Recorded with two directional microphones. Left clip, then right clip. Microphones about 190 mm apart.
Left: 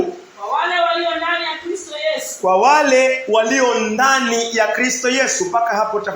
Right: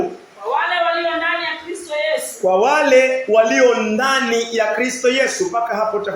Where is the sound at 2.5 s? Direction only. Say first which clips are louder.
Left 1 dB; 15° left (ahead or behind).